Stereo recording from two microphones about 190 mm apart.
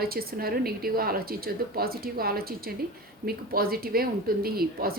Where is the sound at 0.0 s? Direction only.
50° right (ahead or behind).